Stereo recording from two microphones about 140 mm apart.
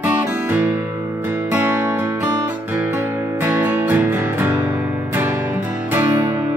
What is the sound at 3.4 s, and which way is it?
Music, 10° right (ahead or behind).